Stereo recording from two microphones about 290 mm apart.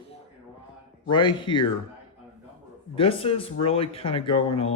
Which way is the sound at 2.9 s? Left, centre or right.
Centre.